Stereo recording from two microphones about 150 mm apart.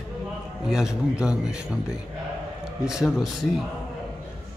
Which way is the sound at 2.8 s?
Centre (ahead or behind).